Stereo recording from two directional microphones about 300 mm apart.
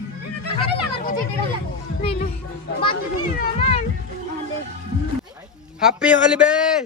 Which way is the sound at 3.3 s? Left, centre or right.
Left.